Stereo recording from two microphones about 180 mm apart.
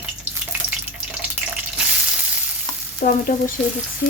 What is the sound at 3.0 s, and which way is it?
Frying, 45° left (ahead or behind).